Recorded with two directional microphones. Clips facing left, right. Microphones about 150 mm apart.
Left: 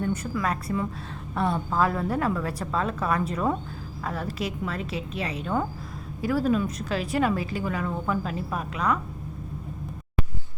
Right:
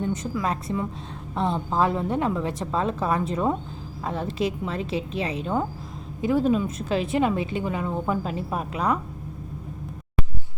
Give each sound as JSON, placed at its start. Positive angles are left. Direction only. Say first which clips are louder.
{"t": 0.0, "sound": "a woman's voice", "louder": "right 1 dB", "side_deg": -20}